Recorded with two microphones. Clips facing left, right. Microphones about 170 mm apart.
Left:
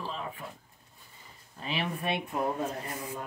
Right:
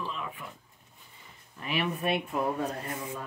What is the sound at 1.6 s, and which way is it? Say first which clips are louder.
Speech: right 3 dB; 30° left (ahead or behind).